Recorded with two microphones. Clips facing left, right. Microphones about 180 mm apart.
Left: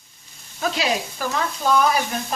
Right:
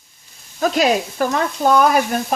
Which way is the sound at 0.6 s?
50° right (ahead or behind).